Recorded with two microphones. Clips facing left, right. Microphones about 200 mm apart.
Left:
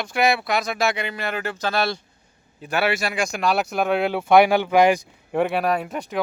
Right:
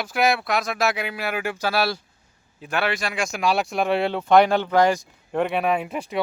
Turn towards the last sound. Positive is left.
turn(degrees=-5)  # may be behind; listen again after turning